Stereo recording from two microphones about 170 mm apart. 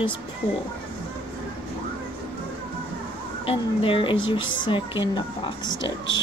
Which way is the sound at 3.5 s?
30° left (ahead or behind).